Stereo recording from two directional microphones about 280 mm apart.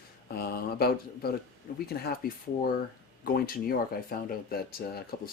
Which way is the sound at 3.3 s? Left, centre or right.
Left.